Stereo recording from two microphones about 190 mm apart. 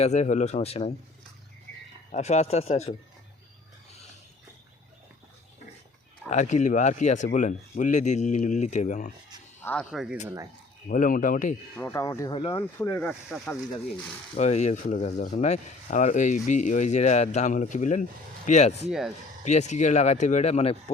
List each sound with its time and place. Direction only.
0.0 s speech: 40° left (ahead or behind)
2.1 s speech: 35° left (ahead or behind)
6.3 s speech: 40° left (ahead or behind)
9.6 s speech: 5° left (ahead or behind)
10.2 s speech: 15° right (ahead or behind)
10.8 s speech: 45° left (ahead or behind)
11.8 s speech: 15° left (ahead or behind)
13.2 s speech: centre (ahead or behind)
14.3 s speech: 35° left (ahead or behind)
18.9 s speech: centre (ahead or behind)
19.5 s speech: 35° left (ahead or behind)